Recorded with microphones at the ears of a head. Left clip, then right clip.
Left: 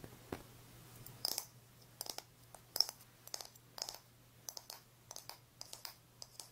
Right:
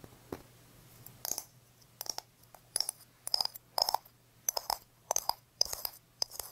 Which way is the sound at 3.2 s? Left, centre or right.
Right.